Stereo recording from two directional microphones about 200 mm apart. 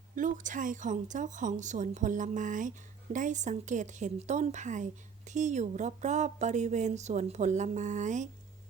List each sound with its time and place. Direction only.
0.2 s a woman's voice: 40° right (ahead or behind)